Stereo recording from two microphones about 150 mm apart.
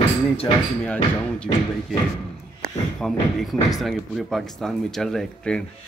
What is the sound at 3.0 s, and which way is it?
Speech, centre (ahead or behind).